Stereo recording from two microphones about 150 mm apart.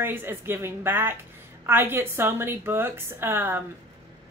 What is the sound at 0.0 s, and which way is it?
A woman's voice, 15° right (ahead or behind).